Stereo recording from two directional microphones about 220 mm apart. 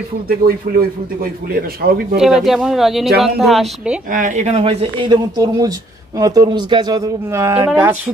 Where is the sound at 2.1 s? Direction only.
Centre (ahead or behind).